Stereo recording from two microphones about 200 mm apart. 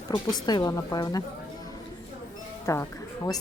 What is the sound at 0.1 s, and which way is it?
A woman's voice, 20° left (ahead or behind).